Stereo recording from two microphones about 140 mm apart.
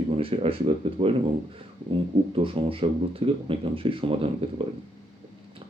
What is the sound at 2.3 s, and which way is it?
Speech, 40° right (ahead or behind).